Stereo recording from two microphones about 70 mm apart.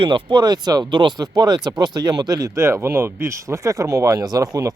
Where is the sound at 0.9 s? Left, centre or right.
Right.